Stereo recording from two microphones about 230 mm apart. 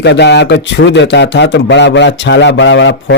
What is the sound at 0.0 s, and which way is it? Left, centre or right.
Speech, left.